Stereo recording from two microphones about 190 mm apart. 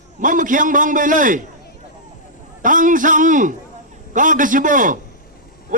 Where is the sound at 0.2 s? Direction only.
45° right (ahead or behind).